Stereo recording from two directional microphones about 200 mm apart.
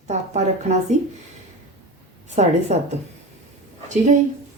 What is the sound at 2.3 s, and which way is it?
Speech, 35° right (ahead or behind).